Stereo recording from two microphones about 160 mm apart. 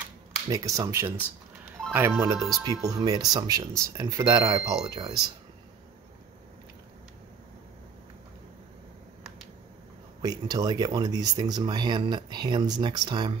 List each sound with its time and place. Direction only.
0.5 s speech: 20° right (ahead or behind)
2.3 s speech: centre (ahead or behind)
2.8 s speech: 25° right (ahead or behind)
10.2 s speech: 25° right (ahead or behind)